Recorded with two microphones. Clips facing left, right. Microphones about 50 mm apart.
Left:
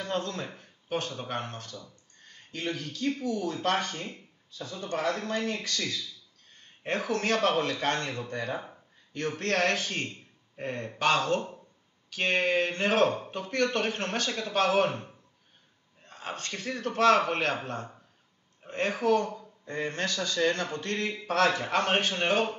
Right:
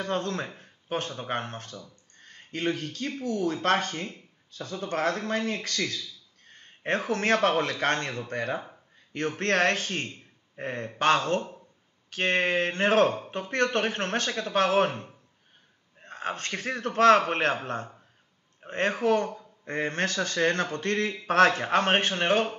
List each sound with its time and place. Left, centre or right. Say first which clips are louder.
0.0 s speech: right 3 dB; right
0.6 s a sound: right 1 dB; right
1.2 s a man's voice: right 3 dB; right
16.0 s a man's voice: right 5 dB; right
18.7 s a man's voice: right 1 dB; right